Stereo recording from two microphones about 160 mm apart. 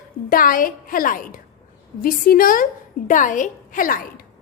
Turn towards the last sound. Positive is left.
turn(degrees=60)  # may be behind; listen again after turning